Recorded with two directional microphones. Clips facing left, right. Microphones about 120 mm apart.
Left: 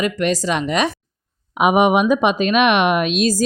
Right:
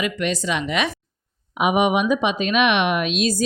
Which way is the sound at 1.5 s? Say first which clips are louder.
Left 4 dB; 50° left (ahead or behind).